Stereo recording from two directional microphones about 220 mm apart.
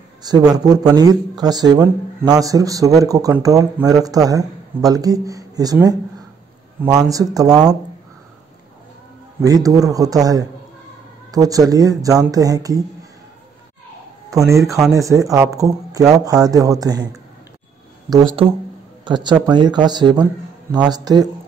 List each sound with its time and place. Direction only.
0.2 s speech: 20° right (ahead or behind)
9.4 s speech: 15° right (ahead or behind)
14.3 s speech: 15° right (ahead or behind)
18.1 s speech: 20° right (ahead or behind)